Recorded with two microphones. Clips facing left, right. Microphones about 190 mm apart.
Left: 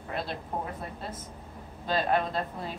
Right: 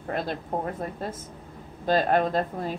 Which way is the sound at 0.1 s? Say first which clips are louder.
Right 5 dB; 45° right (ahead or behind).